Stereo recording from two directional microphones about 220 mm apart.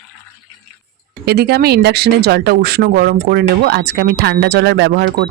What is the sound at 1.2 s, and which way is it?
Speech, 45° right (ahead or behind).